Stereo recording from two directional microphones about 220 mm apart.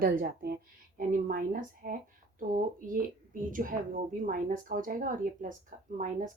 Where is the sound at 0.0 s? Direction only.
40° right (ahead or behind).